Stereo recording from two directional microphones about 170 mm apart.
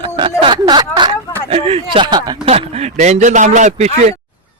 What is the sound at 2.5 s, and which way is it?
Speech, 35° right (ahead or behind).